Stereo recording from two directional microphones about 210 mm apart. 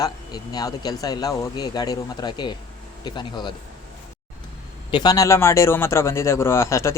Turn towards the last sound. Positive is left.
turn(degrees=15)  # may be behind; listen again after turning